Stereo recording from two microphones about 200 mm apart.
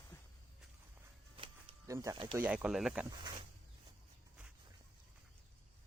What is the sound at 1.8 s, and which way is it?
Speech, 15° right (ahead or behind).